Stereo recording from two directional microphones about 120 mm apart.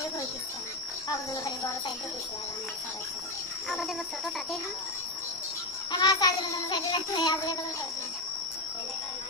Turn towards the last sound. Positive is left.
turn(degrees=35)  # may be behind; listen again after turning